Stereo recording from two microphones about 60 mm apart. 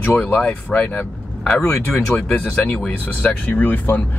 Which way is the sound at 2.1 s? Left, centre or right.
Left.